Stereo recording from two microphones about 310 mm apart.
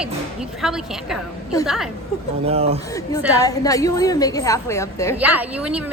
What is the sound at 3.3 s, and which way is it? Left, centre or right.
Speech, centre.